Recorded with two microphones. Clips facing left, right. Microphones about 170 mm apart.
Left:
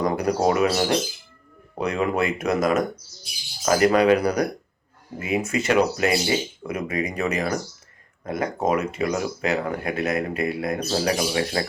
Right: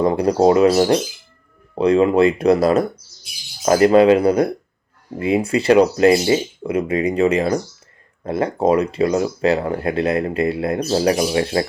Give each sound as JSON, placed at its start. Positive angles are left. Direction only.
{"t": 0.0, "sound": "speech", "side_deg": -30}